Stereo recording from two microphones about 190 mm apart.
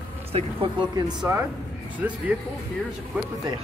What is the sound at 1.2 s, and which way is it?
Speech, 10° right (ahead or behind).